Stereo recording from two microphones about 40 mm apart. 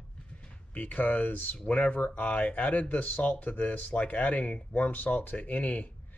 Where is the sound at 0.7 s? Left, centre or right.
Left.